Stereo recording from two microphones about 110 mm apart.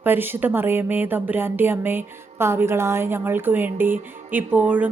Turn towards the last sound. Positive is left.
turn(degrees=-15)  # may be behind; listen again after turning